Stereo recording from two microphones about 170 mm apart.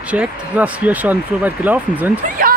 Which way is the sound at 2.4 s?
55° right (ahead or behind).